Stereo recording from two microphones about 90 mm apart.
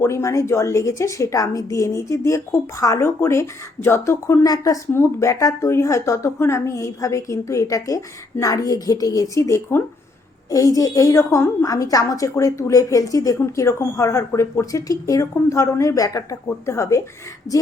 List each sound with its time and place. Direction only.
0.0 s a woman's voice: 30° left (ahead or behind)
4.4 s a woman's voice: 45° left (ahead or behind)
4.9 s a woman's voice: 30° left (ahead or behind)
10.5 s a woman's voice: 40° left (ahead or behind)